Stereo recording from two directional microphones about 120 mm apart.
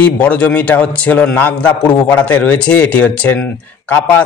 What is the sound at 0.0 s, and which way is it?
A man's voice, 10° left (ahead or behind).